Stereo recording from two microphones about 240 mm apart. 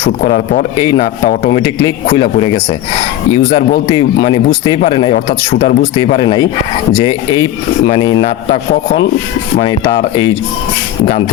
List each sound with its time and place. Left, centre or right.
0.2 s speech: left
9.6 s speech: centre